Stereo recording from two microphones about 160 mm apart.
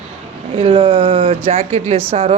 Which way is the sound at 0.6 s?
30° right (ahead or behind).